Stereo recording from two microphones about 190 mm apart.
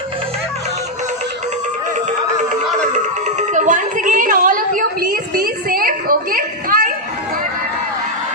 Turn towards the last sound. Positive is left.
turn(degrees=-45)  # may be behind; listen again after turning